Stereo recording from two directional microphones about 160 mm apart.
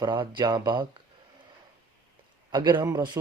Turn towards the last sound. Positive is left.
turn(degrees=-25)  # may be behind; listen again after turning